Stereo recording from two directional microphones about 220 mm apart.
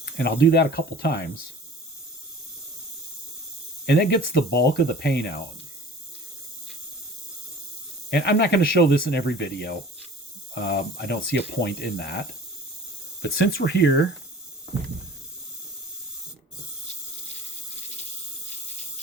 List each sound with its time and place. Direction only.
0.0 s speech: 50° left (ahead or behind)
3.8 s speech: 50° left (ahead or behind)
8.1 s speech: 50° left (ahead or behind)
13.2 s speech: 50° left (ahead or behind)